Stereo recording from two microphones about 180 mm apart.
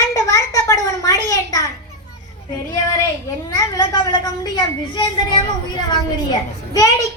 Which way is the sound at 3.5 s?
20° left (ahead or behind).